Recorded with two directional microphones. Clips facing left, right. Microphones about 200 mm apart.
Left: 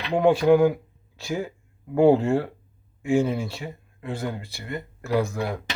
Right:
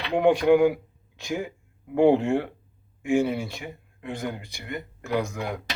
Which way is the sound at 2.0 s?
15° right (ahead or behind).